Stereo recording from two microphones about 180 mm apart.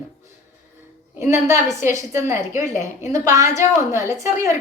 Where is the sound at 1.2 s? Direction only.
15° right (ahead or behind).